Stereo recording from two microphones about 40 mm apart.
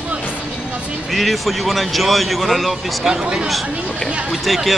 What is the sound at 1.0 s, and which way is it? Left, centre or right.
Speech, centre.